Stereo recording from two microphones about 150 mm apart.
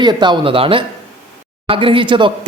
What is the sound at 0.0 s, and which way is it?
Speech, 30° right (ahead or behind).